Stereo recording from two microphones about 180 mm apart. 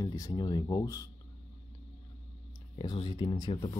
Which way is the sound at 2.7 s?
25° left (ahead or behind).